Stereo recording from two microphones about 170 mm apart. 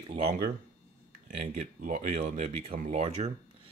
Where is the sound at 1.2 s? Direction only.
55° right (ahead or behind).